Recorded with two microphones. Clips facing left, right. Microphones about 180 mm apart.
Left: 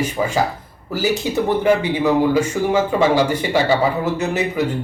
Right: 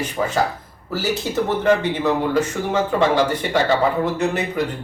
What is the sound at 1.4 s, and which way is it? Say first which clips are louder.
A man's voice: left 2 dB; 10° left (ahead or behind).